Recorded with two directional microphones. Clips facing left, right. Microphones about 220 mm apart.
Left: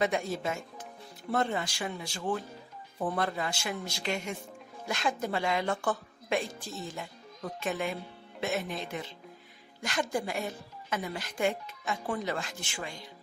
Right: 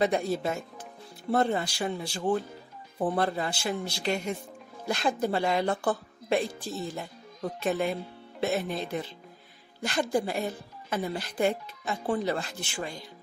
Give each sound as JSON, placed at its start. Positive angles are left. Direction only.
{"t": 0.0, "sound": "a woman's voice", "side_deg": -35}
{"t": 7.6, "sound": "a woman's voice", "side_deg": -35}